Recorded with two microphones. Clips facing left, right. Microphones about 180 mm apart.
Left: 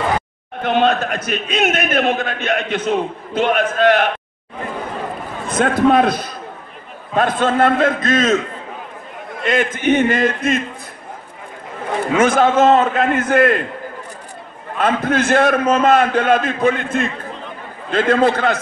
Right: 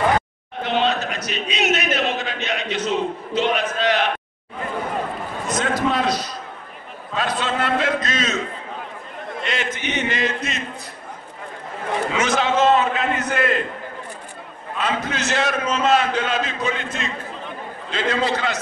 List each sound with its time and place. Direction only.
0.6 s a man's voice: 50° left (ahead or behind)
5.5 s a man's voice: 55° left (ahead or behind)
9.4 s a man's voice: 50° left (ahead or behind)
12.1 s a man's voice: 50° left (ahead or behind)
14.8 s a man's voice: 55° left (ahead or behind)